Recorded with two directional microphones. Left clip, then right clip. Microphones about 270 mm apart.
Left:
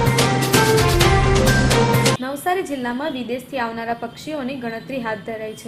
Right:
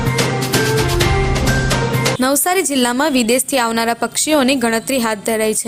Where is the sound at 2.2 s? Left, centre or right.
Right.